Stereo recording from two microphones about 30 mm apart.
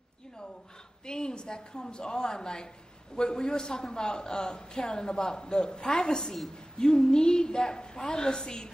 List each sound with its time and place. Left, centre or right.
1.0 s a man's voice: left